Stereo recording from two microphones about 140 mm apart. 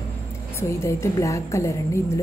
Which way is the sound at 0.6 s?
20° left (ahead or behind).